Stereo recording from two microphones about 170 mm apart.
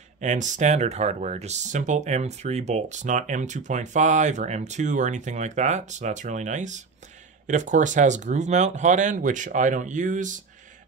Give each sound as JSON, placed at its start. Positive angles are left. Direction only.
{"t": 0.2, "sound": "speech", "side_deg": -45}